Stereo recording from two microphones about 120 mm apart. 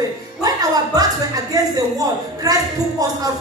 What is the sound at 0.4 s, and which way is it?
A woman's voice, 30° right (ahead or behind).